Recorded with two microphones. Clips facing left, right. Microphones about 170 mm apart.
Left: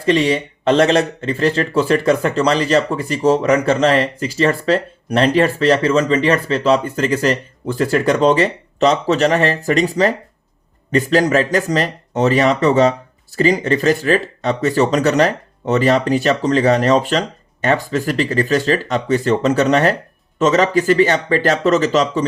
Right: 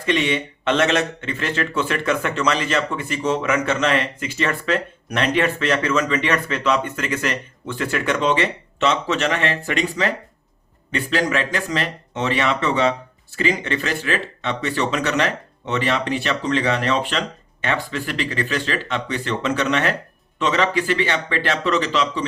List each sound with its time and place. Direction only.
0.0 s speech: 35° left (ahead or behind)